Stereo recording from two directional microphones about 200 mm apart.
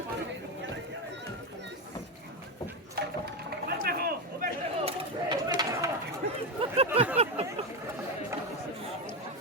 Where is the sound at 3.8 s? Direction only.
50° right (ahead or behind).